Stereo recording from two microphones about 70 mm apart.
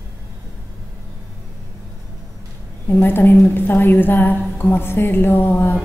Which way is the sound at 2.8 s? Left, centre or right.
Left.